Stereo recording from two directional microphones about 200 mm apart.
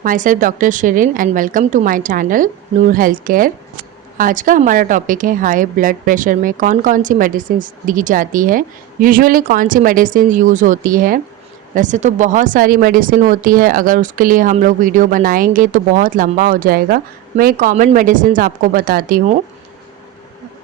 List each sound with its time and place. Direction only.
0.0 s a woman's voice: 40° right (ahead or behind)